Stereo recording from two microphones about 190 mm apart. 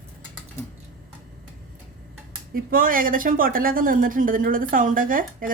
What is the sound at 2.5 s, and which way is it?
Speech, 50° right (ahead or behind).